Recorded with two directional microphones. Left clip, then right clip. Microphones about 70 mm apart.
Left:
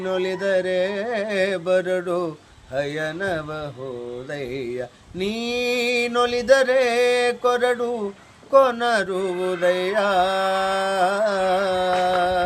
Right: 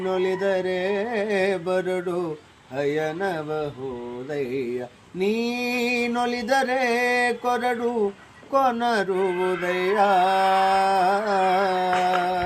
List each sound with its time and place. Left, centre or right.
0.0 s music: left
6.1 s music: left